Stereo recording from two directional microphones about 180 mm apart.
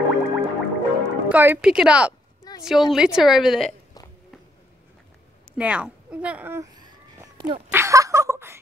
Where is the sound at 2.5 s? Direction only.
20° left (ahead or behind).